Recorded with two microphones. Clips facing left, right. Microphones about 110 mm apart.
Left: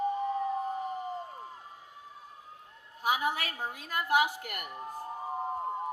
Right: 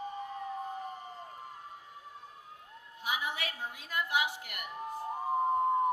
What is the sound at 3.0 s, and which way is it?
A woman's voice, 45° left (ahead or behind).